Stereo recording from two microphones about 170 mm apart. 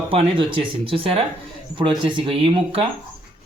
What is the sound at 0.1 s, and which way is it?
Speech, 30° right (ahead or behind).